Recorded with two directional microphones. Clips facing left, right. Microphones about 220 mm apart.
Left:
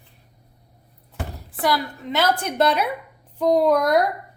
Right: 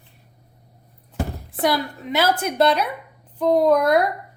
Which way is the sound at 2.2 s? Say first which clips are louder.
Right 1 dB; 5° right (ahead or behind).